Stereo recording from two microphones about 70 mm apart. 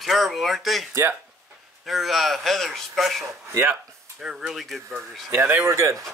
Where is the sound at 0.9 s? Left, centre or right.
Right.